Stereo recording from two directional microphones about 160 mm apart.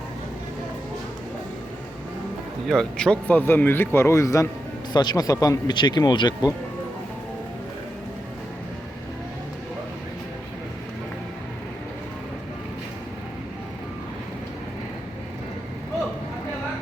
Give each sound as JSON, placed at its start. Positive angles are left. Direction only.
{"t": 2.6, "sound": "speech", "side_deg": 5}